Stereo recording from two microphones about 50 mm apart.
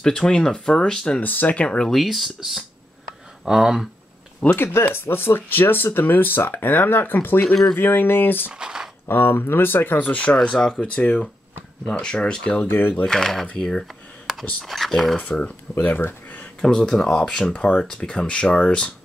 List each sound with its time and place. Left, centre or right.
0.0 s speech: centre
1.2 s speech: left
1.9 s speech: centre
4.4 s speech: left
4.8 s speech: left
8.5 s speech: centre
9.0 s speech: left
10.0 s speech: left
12.6 s speech: left
13.0 s speech: centre
15.8 s speech: left
16.6 s speech: centre